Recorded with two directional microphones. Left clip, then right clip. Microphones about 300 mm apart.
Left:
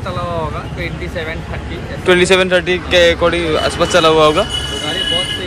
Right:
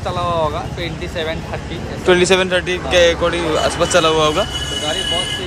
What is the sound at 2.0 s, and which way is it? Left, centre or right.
Speech, centre.